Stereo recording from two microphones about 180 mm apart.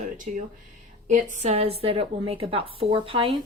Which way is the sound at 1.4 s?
35° right (ahead or behind).